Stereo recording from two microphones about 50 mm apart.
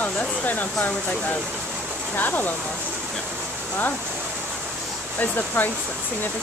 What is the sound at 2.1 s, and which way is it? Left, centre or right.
Speech, left.